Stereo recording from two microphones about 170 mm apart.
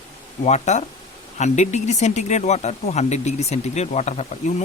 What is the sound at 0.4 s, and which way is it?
Speech, 40° left (ahead or behind).